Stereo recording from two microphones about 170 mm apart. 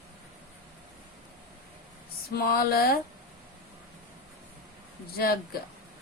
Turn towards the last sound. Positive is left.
turn(degrees=65)  # may be behind; listen again after turning